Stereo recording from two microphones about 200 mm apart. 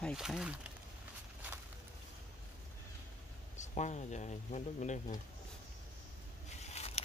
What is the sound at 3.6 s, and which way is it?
Speech, 35° left (ahead or behind).